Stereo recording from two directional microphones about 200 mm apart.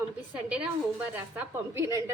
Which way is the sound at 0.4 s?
5° right (ahead or behind).